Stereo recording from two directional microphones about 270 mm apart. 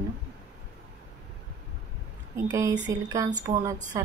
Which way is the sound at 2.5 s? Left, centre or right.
Centre.